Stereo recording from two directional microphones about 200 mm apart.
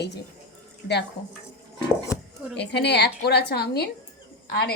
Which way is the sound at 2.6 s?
60° left (ahead or behind).